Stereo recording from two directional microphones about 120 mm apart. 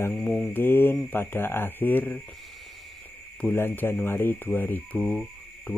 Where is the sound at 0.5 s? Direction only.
15° left (ahead or behind).